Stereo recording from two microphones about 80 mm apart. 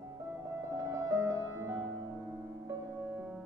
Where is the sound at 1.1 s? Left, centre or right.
Right.